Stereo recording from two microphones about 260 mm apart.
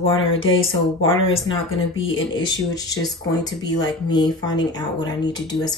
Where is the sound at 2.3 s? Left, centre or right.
Centre.